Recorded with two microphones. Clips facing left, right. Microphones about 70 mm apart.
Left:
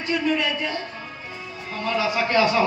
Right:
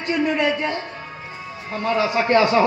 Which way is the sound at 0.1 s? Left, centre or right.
Right.